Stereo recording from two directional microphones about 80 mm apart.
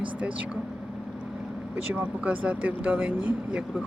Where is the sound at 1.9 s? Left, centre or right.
Right.